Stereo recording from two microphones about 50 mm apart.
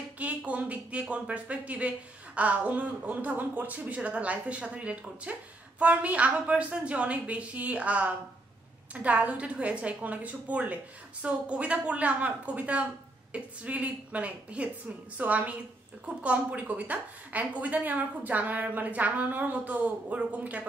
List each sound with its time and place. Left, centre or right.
0.5 s a woman's voice: right